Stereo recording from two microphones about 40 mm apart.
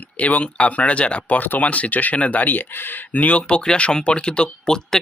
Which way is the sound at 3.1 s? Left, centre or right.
Left.